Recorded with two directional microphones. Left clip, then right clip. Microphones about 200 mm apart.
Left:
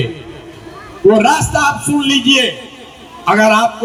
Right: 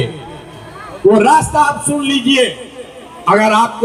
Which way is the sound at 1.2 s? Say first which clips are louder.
Right 2 dB; 40° left (ahead or behind).